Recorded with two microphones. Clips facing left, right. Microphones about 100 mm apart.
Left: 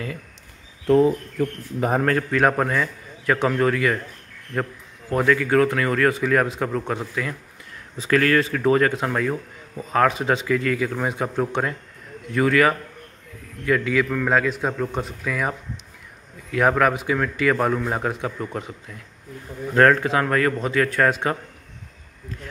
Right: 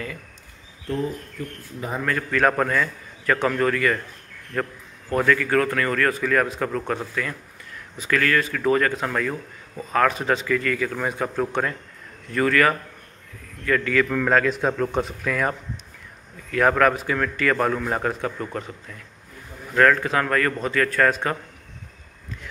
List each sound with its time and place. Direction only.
0.8 s speech: 75° left (ahead or behind)
2.1 s speech: 20° left (ahead or behind)
5.1 s speech: 20° left (ahead or behind)
8.0 s a man's voice: 30° left (ahead or behind)
14.0 s a man's voice: centre (ahead or behind)
19.7 s speech: 30° left (ahead or behind)